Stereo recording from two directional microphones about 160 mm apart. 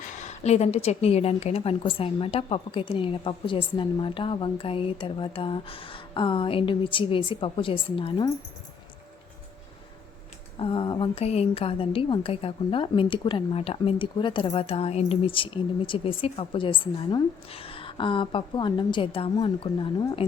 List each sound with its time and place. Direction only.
0.0 s a woman's voice: 45° left (ahead or behind)
10.6 s a woman's voice: 30° left (ahead or behind)